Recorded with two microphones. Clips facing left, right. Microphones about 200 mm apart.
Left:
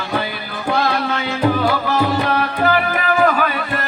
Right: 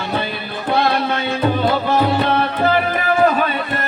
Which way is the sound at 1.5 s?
25° right (ahead or behind).